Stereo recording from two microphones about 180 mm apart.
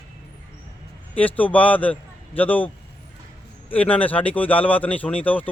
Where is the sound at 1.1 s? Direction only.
10° left (ahead or behind).